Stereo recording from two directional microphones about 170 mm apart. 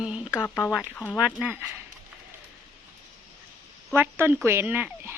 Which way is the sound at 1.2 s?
5° right (ahead or behind).